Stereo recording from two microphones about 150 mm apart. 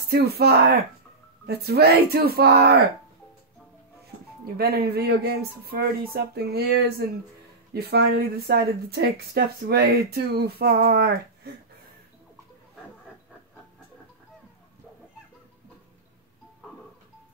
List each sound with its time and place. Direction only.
0.1 s speech: 90° right
4.6 s speech: 90° right